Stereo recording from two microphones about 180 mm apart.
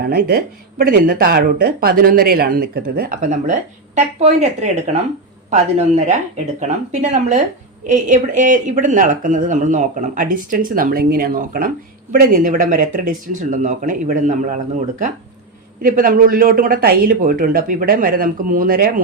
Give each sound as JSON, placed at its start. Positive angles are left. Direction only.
{"t": 0.0, "sound": "speech", "side_deg": -55}
{"t": 15.8, "sound": "speech", "side_deg": -50}